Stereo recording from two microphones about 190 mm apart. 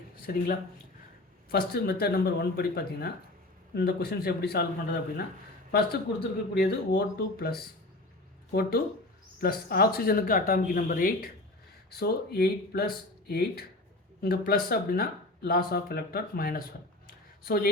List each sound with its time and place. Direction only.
0.3 s speech: 55° left (ahead or behind)
1.5 s speech: 50° left (ahead or behind)
5.7 s speech: 55° left (ahead or behind)
9.4 s speech: 55° left (ahead or behind)
17.1 s a sound: 50° left (ahead or behind)